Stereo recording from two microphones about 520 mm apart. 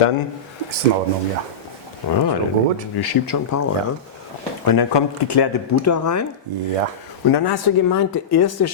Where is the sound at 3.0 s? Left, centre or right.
Left.